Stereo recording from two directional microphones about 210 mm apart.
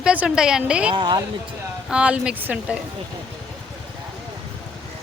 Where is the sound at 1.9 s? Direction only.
5° right (ahead or behind).